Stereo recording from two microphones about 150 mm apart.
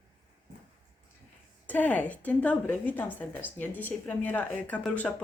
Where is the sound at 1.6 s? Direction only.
10° left (ahead or behind).